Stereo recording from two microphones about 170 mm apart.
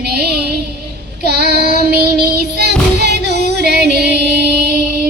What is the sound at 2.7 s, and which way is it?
Music, 75° right (ahead or behind).